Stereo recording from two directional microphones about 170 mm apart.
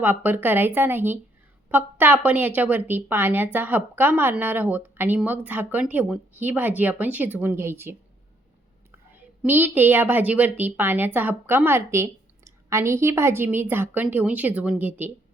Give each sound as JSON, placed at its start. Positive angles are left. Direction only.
{"t": 0.0, "sound": "speech", "side_deg": -10}
{"t": 9.1, "sound": "speech", "side_deg": -10}